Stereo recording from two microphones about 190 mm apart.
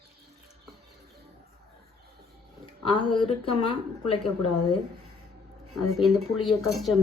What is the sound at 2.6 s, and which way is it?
Speech, 25° left (ahead or behind).